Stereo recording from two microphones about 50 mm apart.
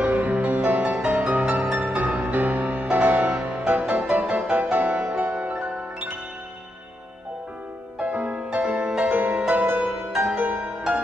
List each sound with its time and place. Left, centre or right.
0.0 s music: right
8.0 s music: right